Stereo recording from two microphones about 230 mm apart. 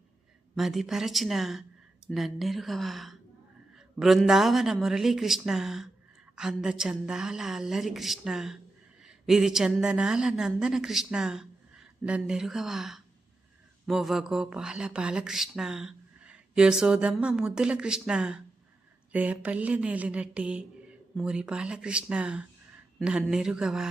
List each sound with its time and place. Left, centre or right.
0.5 s a woman's voice: centre